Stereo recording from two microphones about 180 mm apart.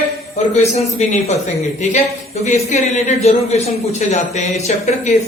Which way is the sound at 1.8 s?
40° left (ahead or behind).